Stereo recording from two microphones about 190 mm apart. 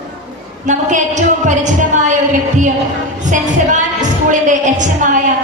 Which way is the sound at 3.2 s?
40° right (ahead or behind).